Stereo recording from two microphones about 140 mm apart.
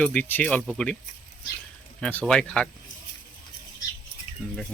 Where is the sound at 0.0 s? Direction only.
10° left (ahead or behind).